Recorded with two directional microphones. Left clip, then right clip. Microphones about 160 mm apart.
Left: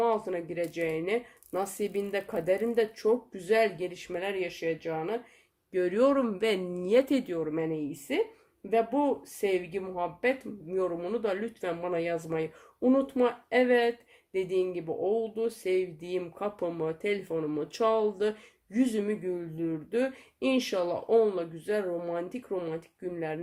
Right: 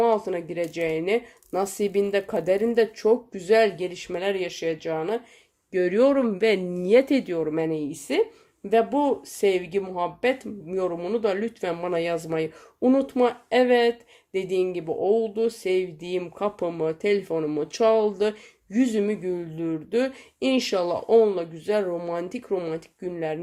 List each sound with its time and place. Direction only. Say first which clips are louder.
0.0 s speech: right 6 dB; 30° right (ahead or behind)